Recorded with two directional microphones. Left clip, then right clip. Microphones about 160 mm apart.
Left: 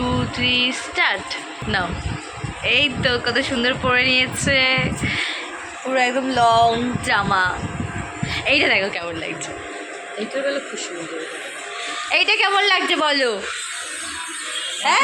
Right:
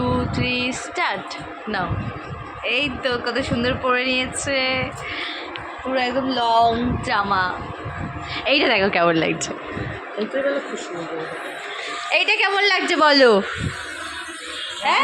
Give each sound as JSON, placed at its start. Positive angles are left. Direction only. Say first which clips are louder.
{"t": 0.0, "sound": "music", "louder": "left 1 dB", "side_deg": 0}
{"t": 2.6, "sound": "a woman's voice", "louder": "left 4 dB", "side_deg": 0}
{"t": 8.4, "sound": "speech", "louder": "left 1 dB", "side_deg": -15}
{"t": 8.8, "sound": "a woman's voice", "louder": "right 7 dB", "side_deg": -55}
{"t": 12.1, "sound": "a woman's voice", "louder": "left 1 dB", "side_deg": 0}
{"t": 13.0, "sound": "a woman's voice", "louder": "right 5 dB", "side_deg": -40}
{"t": 14.8, "sound": "a woman's voice", "louder": "left 1 dB", "side_deg": 5}